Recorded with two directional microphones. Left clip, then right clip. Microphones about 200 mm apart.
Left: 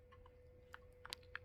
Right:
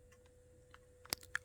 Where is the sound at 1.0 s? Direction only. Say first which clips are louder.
Right 7 dB; 15° left (ahead or behind).